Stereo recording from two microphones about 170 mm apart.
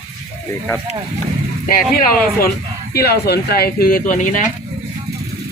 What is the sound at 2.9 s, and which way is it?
Speech, 70° left (ahead or behind).